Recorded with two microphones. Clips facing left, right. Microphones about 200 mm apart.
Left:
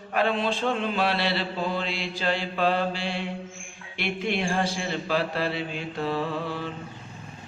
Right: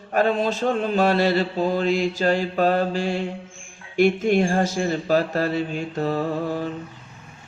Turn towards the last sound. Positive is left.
turn(degrees=-45)  # may be behind; listen again after turning